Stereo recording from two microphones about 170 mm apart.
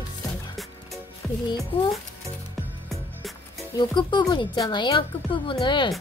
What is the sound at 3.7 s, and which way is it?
Speech, 25° left (ahead or behind).